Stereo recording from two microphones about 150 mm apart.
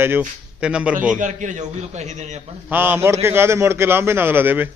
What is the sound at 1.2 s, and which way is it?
A man's voice, 55° right (ahead or behind).